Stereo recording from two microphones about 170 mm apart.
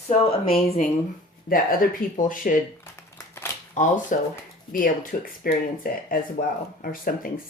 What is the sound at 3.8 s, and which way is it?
Speech, 45° left (ahead or behind).